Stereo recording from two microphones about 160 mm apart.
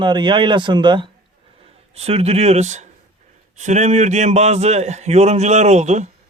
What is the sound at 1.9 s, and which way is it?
A man's voice, 40° right (ahead or behind).